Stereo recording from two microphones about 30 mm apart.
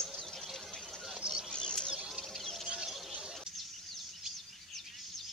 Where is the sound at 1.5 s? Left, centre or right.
Left.